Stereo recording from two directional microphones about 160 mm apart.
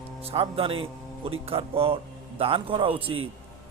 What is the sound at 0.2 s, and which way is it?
Speech, 35° right (ahead or behind).